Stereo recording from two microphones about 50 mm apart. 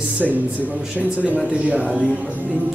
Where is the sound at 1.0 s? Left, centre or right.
Right.